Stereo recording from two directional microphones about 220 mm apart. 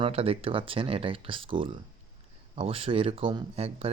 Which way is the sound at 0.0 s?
25° right (ahead or behind).